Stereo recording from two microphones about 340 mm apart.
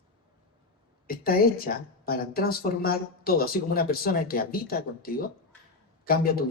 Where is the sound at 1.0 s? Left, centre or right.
Left.